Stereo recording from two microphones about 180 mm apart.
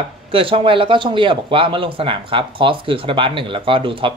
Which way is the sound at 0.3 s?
30° right (ahead or behind).